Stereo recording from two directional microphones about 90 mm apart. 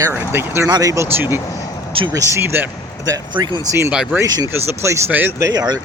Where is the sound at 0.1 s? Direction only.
25° right (ahead or behind).